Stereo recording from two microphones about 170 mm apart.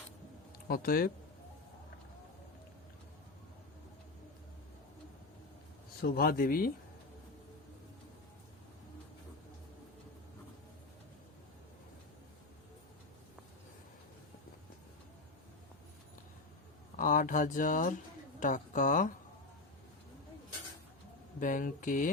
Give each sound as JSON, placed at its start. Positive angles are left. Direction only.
{"t": 0.7, "sound": "speech", "side_deg": 60}
{"t": 6.0, "sound": "speech", "side_deg": 65}
{"t": 17.0, "sound": "speech", "side_deg": 50}
{"t": 21.3, "sound": "speech", "side_deg": 50}